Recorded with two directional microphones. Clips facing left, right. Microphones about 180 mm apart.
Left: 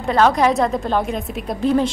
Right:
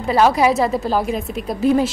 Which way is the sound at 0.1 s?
5° right (ahead or behind).